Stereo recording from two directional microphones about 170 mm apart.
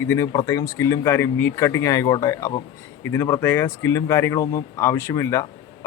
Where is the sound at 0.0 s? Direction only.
15° left (ahead or behind).